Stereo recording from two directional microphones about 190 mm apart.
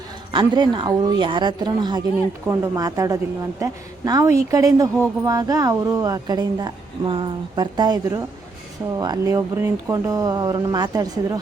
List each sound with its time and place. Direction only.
0.3 s a woman's voice: 25° right (ahead or behind)